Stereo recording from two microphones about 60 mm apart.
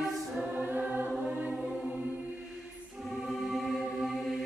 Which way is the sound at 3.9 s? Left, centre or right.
Centre.